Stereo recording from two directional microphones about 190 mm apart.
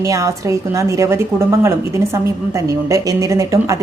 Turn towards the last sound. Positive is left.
turn(degrees=-15)  # may be behind; listen again after turning